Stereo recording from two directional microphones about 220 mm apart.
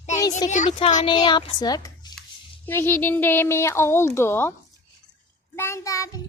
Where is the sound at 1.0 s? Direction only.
20° left (ahead or behind).